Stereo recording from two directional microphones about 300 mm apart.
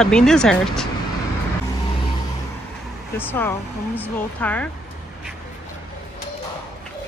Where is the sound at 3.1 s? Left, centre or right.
Centre.